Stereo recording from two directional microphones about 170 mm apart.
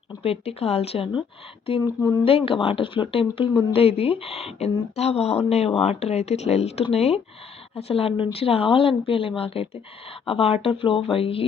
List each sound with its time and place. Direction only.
0.2 s speech: 35° left (ahead or behind)